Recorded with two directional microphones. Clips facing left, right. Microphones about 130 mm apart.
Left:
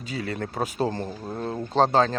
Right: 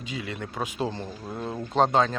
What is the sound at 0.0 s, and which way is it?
Speech, 40° left (ahead or behind).